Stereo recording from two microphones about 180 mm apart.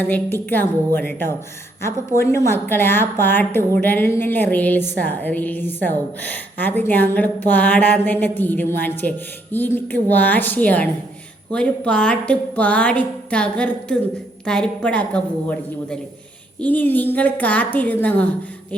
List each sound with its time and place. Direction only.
0.0 s a woman's voice: 10° left (ahead or behind)